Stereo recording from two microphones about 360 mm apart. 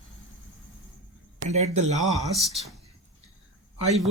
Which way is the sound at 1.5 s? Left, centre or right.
Centre.